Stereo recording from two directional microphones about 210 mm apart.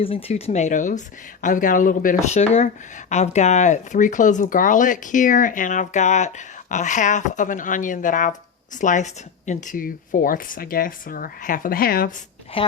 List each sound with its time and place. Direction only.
0.0 s speech: 25° left (ahead or behind); by 12.1 s 45° left (ahead or behind)
12.6 s a woman's voice: 25° left (ahead or behind)